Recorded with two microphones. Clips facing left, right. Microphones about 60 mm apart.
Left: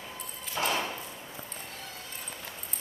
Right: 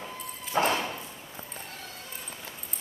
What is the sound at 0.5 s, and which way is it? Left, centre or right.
Clip-clop, right.